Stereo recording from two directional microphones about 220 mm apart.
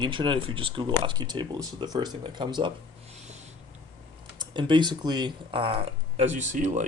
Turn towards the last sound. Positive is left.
turn(degrees=-35)  # may be behind; listen again after turning